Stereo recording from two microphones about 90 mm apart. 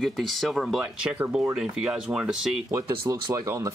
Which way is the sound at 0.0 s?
Centre (ahead or behind).